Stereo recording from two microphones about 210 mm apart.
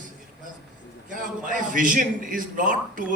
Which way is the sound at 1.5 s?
40° right (ahead or behind).